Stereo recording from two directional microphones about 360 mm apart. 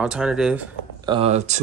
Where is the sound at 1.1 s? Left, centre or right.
Centre.